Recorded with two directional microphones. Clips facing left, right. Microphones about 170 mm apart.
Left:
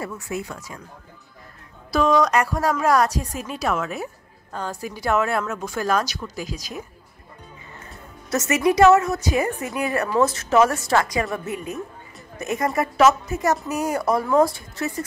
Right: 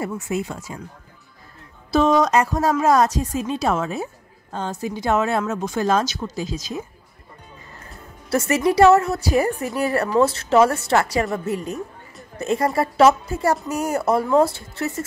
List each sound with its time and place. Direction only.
0.0 s a woman's voice: 25° right (ahead or behind)
1.9 s a woman's voice: 25° right (ahead or behind)
8.3 s a woman's voice: 30° right (ahead or behind)